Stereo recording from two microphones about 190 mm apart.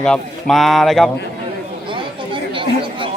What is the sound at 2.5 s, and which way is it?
Chatter, 25° right (ahead or behind).